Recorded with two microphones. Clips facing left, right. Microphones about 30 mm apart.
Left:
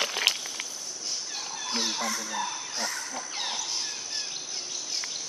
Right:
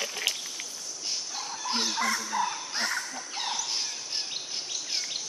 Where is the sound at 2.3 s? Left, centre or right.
Right.